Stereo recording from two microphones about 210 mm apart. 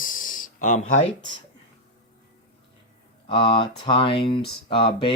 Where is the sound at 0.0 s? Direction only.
40° left (ahead or behind).